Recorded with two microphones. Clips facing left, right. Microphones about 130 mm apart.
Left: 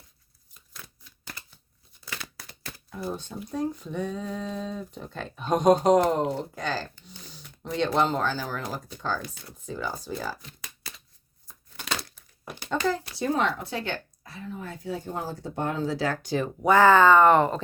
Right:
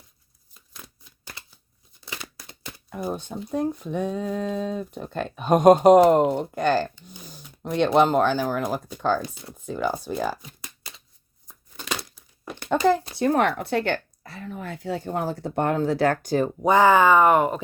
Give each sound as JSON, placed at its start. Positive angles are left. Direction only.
{"t": 2.0, "sound": "a sound", "side_deg": -20}
{"t": 2.9, "sound": "speech", "side_deg": -60}
{"t": 7.3, "sound": "speech", "side_deg": -50}
{"t": 13.1, "sound": "speech", "side_deg": -60}
{"t": 16.6, "sound": "speech", "side_deg": -15}